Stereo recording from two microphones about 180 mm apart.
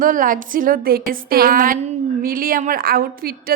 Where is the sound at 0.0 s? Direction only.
50° right (ahead or behind).